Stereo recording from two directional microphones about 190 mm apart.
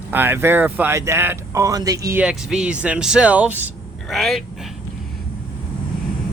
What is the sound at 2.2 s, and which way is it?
Speech, 5° right (ahead or behind).